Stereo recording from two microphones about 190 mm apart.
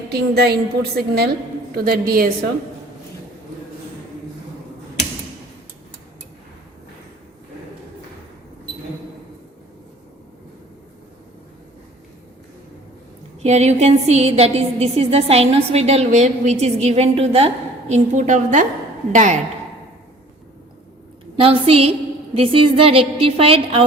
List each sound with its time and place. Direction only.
0.1 s a woman's voice: 55° right (ahead or behind)
13.4 s a woman's voice: 35° right (ahead or behind)
21.3 s a woman's voice: 30° right (ahead or behind)